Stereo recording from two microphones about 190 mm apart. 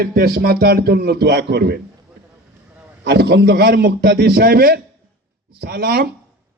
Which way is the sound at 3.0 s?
55° right (ahead or behind).